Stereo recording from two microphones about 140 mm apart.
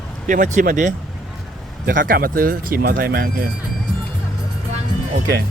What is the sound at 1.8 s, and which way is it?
Speech, 85° right.